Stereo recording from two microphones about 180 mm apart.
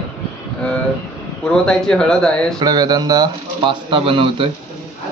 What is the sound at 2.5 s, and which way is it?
Speech, 20° right (ahead or behind).